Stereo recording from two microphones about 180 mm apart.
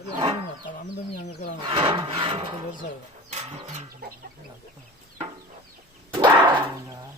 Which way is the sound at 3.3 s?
40° right (ahead or behind).